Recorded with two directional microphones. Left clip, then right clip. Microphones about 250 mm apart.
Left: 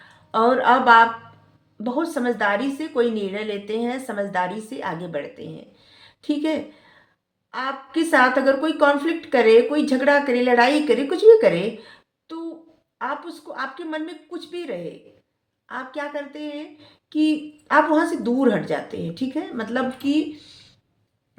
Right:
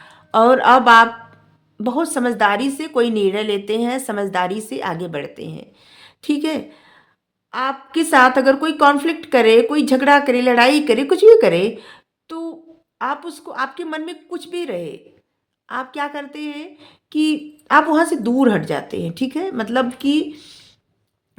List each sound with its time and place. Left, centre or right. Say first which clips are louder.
0.1 s a woman's voice: right 6 dB; right